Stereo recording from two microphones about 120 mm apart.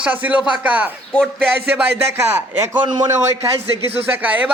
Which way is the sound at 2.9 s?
30° right (ahead or behind).